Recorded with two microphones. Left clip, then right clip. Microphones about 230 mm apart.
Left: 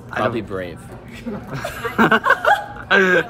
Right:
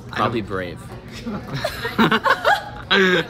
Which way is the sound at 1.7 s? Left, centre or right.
Centre.